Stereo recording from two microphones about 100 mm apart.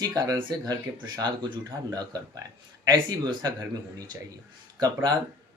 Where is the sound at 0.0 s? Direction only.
40° right (ahead or behind).